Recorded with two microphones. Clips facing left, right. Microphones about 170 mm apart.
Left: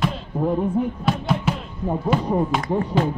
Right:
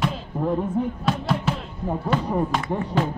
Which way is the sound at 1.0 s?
Centre (ahead or behind).